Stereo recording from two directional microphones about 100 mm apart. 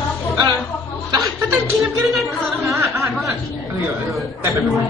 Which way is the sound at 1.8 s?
Centre (ahead or behind).